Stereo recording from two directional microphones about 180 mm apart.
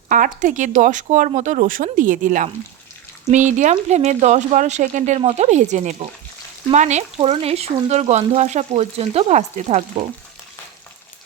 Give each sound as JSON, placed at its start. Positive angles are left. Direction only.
{"t": 0.1, "sound": "speech", "side_deg": -45}